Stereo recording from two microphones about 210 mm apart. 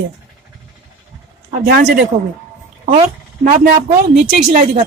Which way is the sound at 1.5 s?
40° right (ahead or behind).